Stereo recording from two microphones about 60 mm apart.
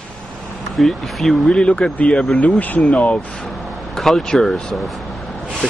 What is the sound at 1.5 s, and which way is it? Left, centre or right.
Speech, centre.